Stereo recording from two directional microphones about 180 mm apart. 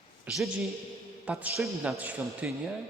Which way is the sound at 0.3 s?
Centre (ahead or behind).